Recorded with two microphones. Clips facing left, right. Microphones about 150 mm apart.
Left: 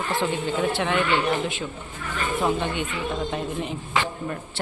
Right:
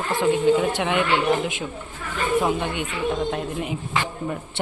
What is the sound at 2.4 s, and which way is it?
Speech, 10° right (ahead or behind).